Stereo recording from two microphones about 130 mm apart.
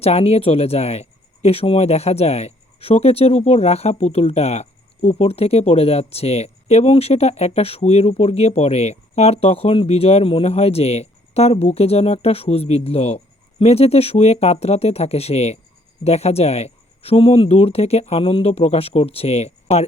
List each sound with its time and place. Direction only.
0.0 s speech: 55° left (ahead or behind)